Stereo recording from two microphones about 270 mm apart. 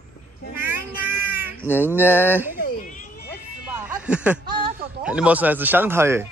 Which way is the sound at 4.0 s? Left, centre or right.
Centre.